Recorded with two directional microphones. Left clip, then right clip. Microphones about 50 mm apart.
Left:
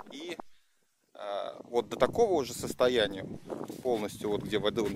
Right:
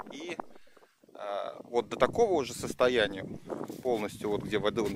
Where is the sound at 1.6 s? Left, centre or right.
Centre.